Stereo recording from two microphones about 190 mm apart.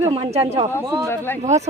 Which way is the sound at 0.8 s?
20° right (ahead or behind).